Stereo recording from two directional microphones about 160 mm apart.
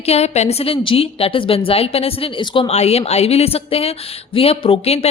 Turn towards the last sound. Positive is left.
turn(degrees=40)  # may be behind; listen again after turning